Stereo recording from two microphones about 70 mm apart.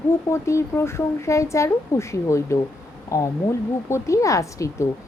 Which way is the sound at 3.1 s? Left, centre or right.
Left.